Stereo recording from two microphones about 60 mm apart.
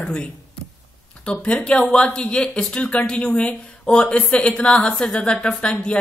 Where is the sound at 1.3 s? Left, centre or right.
Centre.